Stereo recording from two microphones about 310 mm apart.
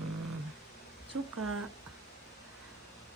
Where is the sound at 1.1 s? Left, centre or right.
Right.